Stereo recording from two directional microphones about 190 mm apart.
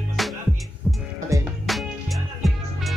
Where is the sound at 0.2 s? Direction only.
Centre (ahead or behind).